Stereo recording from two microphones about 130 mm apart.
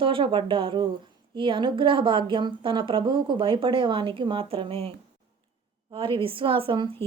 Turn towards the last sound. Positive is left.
turn(degrees=-40)  # may be behind; listen again after turning